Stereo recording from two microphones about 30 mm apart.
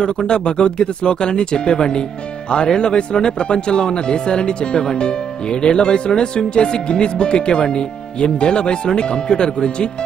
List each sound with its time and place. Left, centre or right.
0.3 s speech: left